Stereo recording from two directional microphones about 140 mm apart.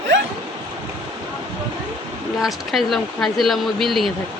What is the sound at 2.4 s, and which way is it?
Speech, centre (ahead or behind).